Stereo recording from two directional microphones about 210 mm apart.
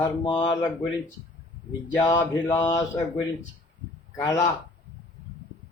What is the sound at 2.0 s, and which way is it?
Speech, 15° left (ahead or behind).